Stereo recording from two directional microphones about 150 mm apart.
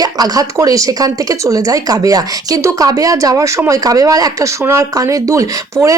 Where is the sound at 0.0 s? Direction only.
25° right (ahead or behind).